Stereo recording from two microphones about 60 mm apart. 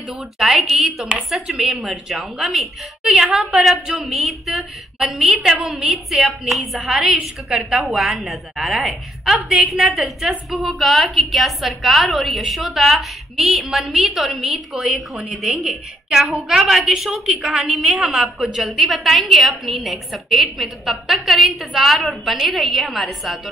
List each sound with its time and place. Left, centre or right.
0.4 s a woman's voice: centre
3.0 s a woman's voice: centre